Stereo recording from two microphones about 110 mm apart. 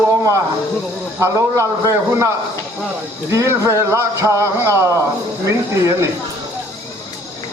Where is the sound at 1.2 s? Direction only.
25° right (ahead or behind).